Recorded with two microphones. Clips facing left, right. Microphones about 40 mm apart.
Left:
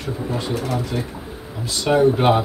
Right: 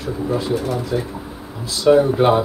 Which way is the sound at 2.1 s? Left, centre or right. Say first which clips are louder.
Right 2 dB; centre.